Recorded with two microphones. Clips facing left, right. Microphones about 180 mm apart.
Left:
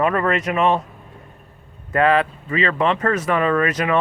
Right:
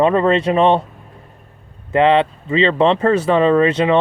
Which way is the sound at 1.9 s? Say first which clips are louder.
Right 4 dB; 25° right (ahead or behind).